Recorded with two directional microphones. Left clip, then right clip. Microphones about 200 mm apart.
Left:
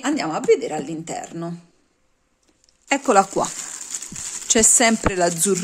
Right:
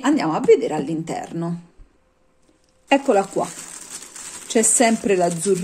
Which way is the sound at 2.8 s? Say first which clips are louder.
Even; 30° left (ahead or behind).